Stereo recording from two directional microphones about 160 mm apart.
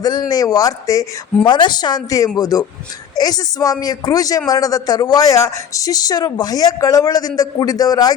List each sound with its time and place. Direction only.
0.0 s speech: 25° left (ahead or behind)